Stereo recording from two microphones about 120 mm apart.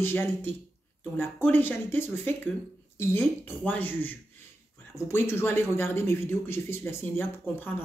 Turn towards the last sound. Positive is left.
turn(degrees=15)  # may be behind; listen again after turning